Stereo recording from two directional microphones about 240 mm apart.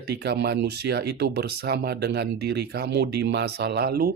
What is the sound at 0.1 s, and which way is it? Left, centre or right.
Speech, right.